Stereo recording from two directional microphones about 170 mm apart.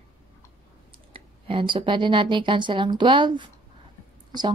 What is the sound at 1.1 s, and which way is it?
A woman's voice, 30° right (ahead or behind).